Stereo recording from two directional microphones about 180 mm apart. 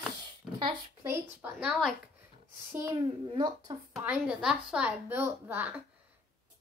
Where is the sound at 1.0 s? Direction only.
10° right (ahead or behind).